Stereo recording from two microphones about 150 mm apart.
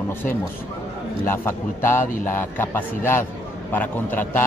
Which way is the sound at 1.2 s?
15° left (ahead or behind).